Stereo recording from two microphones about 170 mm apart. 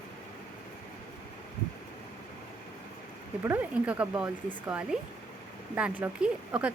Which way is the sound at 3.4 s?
10° right (ahead or behind).